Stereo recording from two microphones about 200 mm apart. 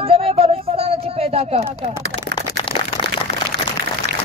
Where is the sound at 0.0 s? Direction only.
30° right (ahead or behind).